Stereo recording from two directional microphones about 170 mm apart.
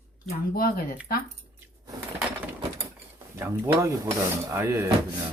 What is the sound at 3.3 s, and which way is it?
Speech, 15° right (ahead or behind).